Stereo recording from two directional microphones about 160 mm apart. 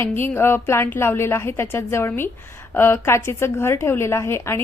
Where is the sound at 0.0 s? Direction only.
15° left (ahead or behind).